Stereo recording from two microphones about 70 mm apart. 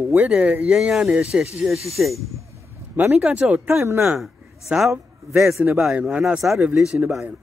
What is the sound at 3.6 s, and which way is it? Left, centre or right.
Speech, right.